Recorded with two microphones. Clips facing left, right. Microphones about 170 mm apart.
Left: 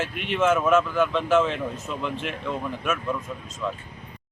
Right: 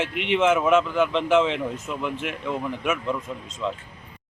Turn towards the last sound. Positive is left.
turn(degrees=-20)  # may be behind; listen again after turning